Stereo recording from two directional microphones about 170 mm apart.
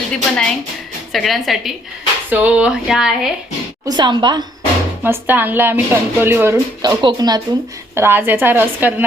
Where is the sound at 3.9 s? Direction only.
25° right (ahead or behind).